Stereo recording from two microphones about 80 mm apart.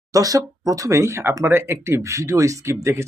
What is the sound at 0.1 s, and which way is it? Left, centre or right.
Speech, right.